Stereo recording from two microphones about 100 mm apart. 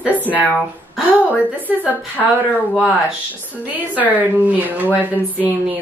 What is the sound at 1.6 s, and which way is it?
Speech, 15° right (ahead or behind).